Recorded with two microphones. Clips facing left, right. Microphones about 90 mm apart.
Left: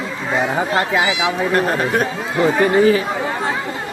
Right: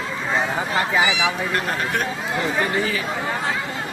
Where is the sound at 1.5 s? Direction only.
35° left (ahead or behind).